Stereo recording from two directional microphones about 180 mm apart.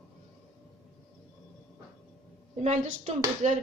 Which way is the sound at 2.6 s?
40° right (ahead or behind).